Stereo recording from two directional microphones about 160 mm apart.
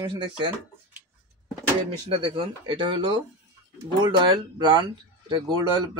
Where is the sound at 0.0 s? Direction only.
30° right (ahead or behind).